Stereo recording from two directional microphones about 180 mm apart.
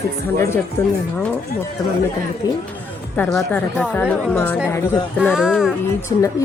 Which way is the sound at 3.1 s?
10° left (ahead or behind).